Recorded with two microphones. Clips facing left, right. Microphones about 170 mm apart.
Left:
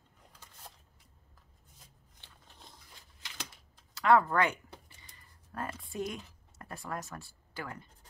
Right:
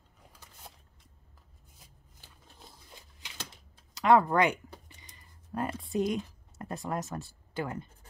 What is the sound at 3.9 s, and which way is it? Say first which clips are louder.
Speech: right 2 dB; 20° right (ahead or behind).